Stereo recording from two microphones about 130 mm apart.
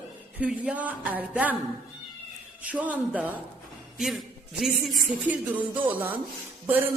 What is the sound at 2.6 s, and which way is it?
A woman's voice, 10° right (ahead or behind).